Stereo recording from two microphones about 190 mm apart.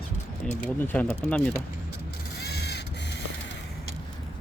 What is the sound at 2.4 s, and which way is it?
Crow, 60° left (ahead or behind).